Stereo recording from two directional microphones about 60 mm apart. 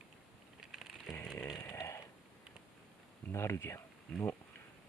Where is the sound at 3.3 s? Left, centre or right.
Left.